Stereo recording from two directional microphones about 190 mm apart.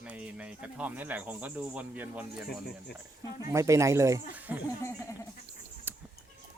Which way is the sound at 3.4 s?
15° right (ahead or behind).